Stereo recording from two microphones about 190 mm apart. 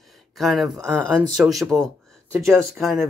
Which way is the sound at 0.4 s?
Centre (ahead or behind).